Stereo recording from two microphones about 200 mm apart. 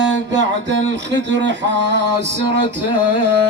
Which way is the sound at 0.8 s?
60° right (ahead or behind).